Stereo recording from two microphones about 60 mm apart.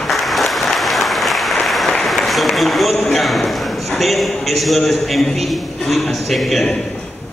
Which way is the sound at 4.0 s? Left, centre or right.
Centre.